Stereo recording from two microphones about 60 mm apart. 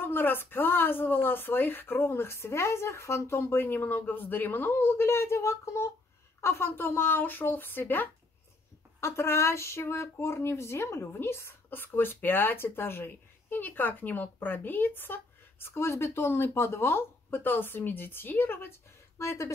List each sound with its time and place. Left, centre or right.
0.0 s speech: left
6.4 s speech: left
9.0 s speech: left
19.1 s speech: left